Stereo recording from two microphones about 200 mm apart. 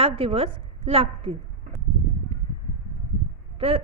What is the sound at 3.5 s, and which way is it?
Speech, 30° right (ahead or behind).